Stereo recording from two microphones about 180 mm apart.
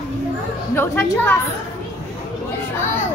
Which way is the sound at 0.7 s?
10° left (ahead or behind).